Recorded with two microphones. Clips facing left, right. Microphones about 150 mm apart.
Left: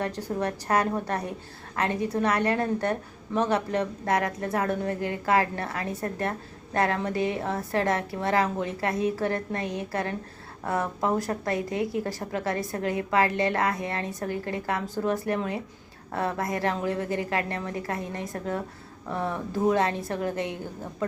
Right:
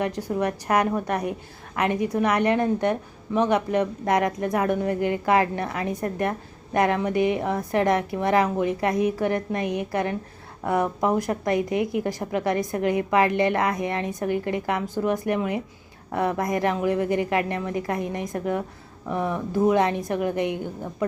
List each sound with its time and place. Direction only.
0.0 s speech: 10° right (ahead or behind)